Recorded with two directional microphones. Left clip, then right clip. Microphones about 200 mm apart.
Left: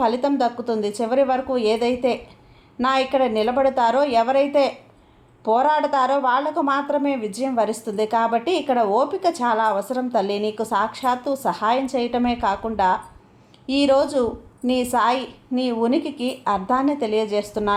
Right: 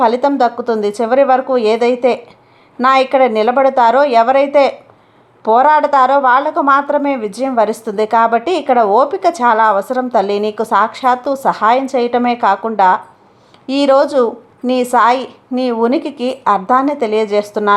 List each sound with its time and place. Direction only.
0.0 s a woman's voice: 20° right (ahead or behind)